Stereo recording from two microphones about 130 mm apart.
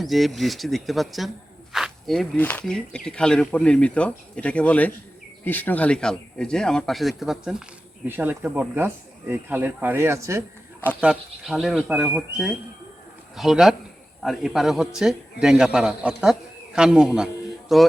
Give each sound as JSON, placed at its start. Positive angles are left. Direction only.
{"t": 0.0, "sound": "a man's voice", "side_deg": 0}
{"t": 1.7, "sound": "cricket", "side_deg": 0}
{"t": 2.4, "sound": "a man's voice", "side_deg": 10}
{"t": 8.0, "sound": "speech", "side_deg": -15}
{"t": 11.0, "sound": "a man's voice", "side_deg": -5}